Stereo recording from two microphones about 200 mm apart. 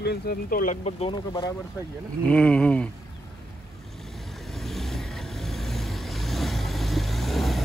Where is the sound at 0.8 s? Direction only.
30° left (ahead or behind).